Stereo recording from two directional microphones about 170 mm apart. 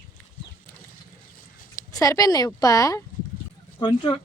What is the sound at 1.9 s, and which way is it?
Speech, 20° left (ahead or behind).